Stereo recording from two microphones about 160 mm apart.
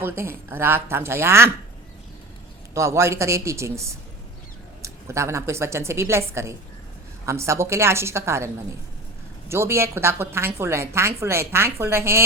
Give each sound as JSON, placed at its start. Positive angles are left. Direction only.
{"t": 0.0, "sound": "a woman's voice", "side_deg": -15}
{"t": 2.7, "sound": "a woman's voice", "side_deg": -15}
{"t": 9.5, "sound": "a woman's voice", "side_deg": -15}